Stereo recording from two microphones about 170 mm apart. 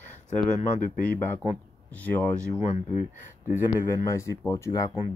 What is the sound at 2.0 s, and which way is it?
Speech, 10° left (ahead or behind).